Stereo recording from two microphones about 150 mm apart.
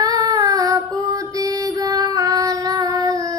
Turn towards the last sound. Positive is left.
turn(degrees=-25)  # may be behind; listen again after turning